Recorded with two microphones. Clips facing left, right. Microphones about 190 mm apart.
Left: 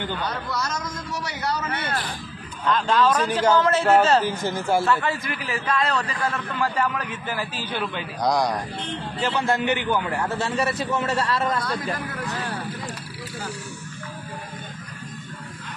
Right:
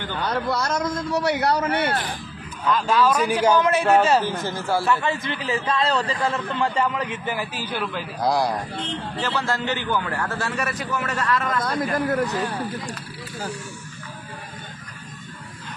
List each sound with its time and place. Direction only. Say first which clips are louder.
0.2 s a man's voice: right 4 dB; 60° right (ahead or behind)
2.6 s a man's voice: right 1 dB; 10° right (ahead or behind)
4.2 s speech: left 1 dB; 15° left (ahead or behind)
5.0 s a man's voice: right 2 dB; 25° right (ahead or behind)
7.8 s a man's voice: even; centre (ahead or behind)
9.2 s a man's voice: left 3 dB; 15° left (ahead or behind)
11.6 s a man's voice: right 5 dB; 40° right (ahead or behind)